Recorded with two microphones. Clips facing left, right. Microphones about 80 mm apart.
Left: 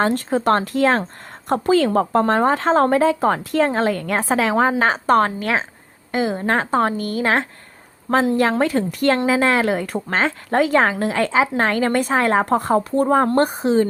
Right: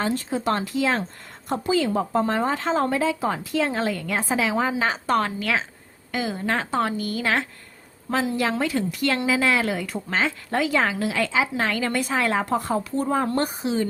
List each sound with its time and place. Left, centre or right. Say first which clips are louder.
0.0 s a woman's voice: left 6 dB; left